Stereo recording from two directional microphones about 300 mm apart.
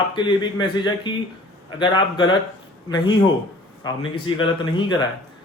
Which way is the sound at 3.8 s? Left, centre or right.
Centre.